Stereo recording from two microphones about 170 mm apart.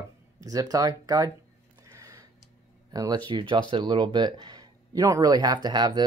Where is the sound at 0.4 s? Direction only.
20° right (ahead or behind).